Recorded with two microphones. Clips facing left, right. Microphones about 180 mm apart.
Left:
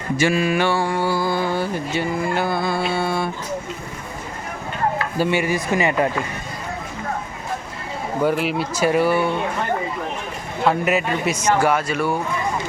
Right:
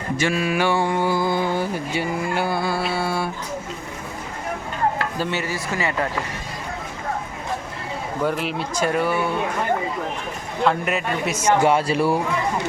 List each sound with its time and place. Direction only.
0.2 s speech: 5° left (ahead or behind)
0.7 s a sound: 20° right (ahead or behind)
5.1 s speech: 10° left (ahead or behind)
8.2 s speech: 5° left (ahead or behind)
10.6 s speech: 5° left (ahead or behind)
11.6 s speech: 30° right (ahead or behind)